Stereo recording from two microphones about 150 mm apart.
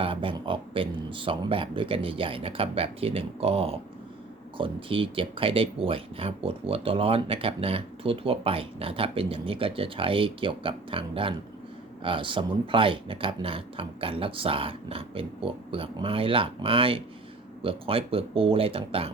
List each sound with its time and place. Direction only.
0.0 s speech: 35° right (ahead or behind)